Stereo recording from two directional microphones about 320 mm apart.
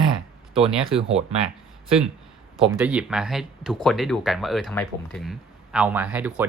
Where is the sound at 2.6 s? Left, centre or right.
Centre.